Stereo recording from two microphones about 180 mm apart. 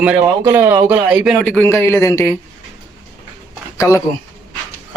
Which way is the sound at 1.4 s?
5° left (ahead or behind).